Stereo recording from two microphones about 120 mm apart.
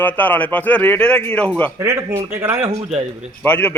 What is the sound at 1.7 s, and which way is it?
Speech, 25° right (ahead or behind).